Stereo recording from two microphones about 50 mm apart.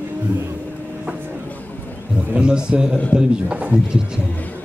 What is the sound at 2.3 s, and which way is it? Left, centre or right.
A man's voice, centre.